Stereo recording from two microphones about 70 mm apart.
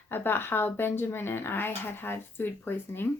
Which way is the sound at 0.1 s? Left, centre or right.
Left.